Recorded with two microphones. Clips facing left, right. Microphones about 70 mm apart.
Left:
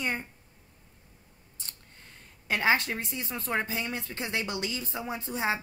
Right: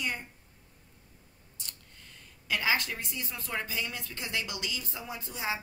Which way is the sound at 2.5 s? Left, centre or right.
Left.